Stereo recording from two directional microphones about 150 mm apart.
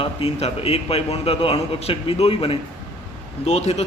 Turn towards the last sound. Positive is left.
turn(degrees=45)  # may be behind; listen again after turning